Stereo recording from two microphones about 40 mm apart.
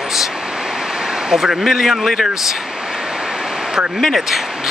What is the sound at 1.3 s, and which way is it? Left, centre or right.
Speech, centre.